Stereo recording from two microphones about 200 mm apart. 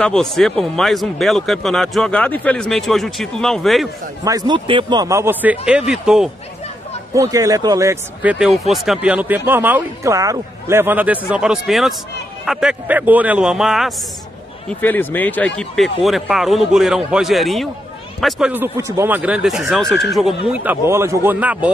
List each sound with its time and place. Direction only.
0.0 s speech: 5° left (ahead or behind)
4.2 s speech: 20° right (ahead or behind)
7.2 s speech: 15° right (ahead or behind)
14.7 s speech: 10° left (ahead or behind)
20.4 s speech: 10° right (ahead or behind)